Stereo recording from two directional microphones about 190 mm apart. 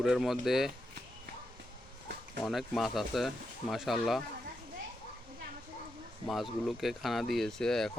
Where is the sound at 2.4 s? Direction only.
Centre (ahead or behind).